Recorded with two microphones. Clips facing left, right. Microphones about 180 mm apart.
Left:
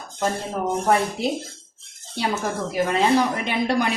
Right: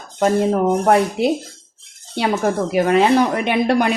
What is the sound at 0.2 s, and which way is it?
Speech, 70° right (ahead or behind).